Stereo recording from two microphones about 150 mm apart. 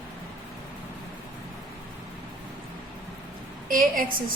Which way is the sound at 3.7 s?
65° right (ahead or behind).